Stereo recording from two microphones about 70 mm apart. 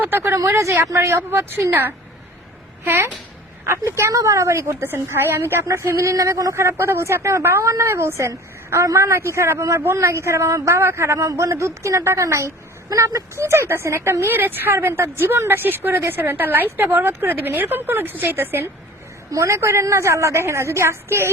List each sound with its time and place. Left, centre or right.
0.0 s speech: right
0.3 s a woman's voice: right
19.3 s a woman's voice: right